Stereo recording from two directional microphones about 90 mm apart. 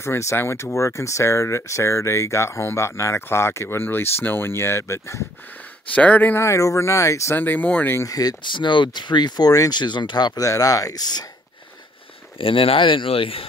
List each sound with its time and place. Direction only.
0.0 s speech: 30° left (ahead or behind)
5.9 s speech: 15° left (ahead or behind)
6.4 s speech: 35° left (ahead or behind)
7.3 s speech: 20° left (ahead or behind)
8.0 s speech: 45° left (ahead or behind)
12.4 s speech: 90° left